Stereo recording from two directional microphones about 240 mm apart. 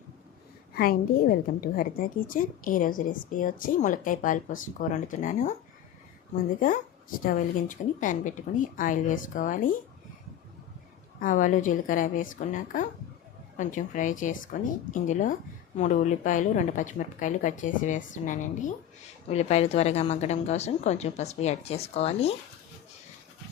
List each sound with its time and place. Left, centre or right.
0.7 s a woman's voice: left
7.3 s a woman's voice: left
11.2 s a woman's voice: left